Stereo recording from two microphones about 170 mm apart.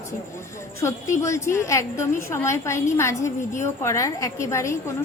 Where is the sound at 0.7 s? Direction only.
15° left (ahead or behind).